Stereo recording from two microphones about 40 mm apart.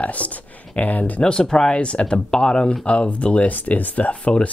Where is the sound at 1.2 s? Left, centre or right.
Centre.